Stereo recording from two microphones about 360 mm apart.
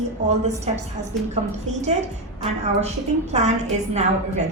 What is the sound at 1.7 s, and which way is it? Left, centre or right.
Speech, centre.